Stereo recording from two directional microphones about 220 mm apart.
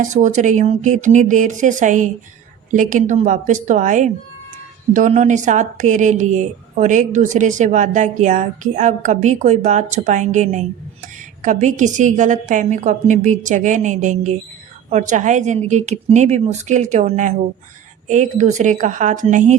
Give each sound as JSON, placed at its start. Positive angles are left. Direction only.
{"t": 0.0, "sound": "speech", "side_deg": -35}